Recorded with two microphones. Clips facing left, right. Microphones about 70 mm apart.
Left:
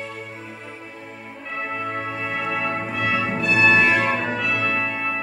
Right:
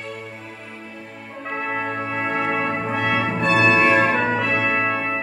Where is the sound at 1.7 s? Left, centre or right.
Right.